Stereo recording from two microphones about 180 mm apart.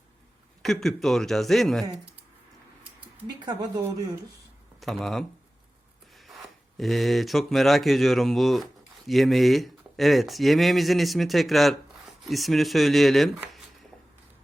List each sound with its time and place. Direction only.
0.6 s speech: centre (ahead or behind)
3.4 s speech: 15° right (ahead or behind)
4.8 s speech: centre (ahead or behind)